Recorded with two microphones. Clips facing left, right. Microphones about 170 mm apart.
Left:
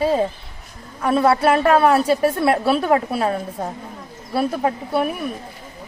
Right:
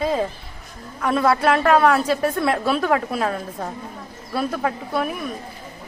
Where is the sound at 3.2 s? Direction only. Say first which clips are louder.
Left 3 dB; 20° left (ahead or behind).